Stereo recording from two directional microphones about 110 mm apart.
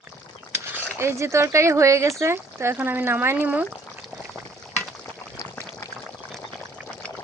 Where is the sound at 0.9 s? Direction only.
25° right (ahead or behind).